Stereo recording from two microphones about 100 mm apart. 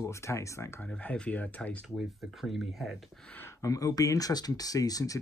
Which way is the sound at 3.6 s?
35° left (ahead or behind).